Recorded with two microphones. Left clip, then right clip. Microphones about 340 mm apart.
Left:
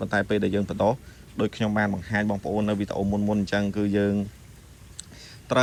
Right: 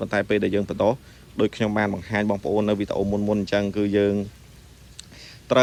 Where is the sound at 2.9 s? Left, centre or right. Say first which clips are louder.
Right 3 dB; right.